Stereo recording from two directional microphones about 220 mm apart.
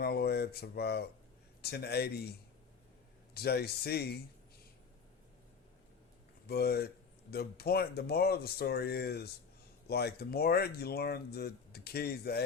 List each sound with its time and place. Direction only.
0.0 s speech: 45° left (ahead or behind)
3.3 s speech: 45° left (ahead or behind)
6.5 s speech: 45° left (ahead or behind)